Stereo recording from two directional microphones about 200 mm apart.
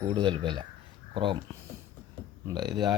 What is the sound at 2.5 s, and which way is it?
Speech, 20° right (ahead or behind).